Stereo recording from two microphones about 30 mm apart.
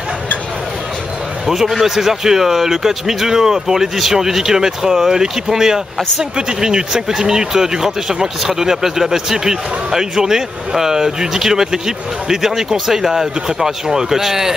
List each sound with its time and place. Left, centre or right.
1.5 s speech: centre